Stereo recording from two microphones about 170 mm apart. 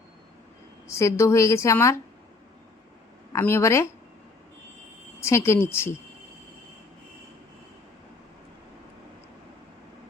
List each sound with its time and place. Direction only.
0.9 s a woman's voice: 15° left (ahead or behind)
3.3 s a woman's voice: 15° left (ahead or behind)
5.2 s a woman's voice: 15° left (ahead or behind)